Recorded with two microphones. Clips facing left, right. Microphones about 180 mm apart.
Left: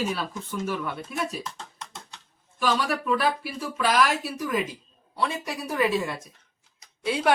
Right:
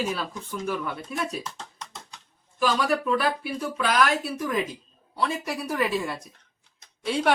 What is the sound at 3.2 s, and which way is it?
Speech, centre (ahead or behind).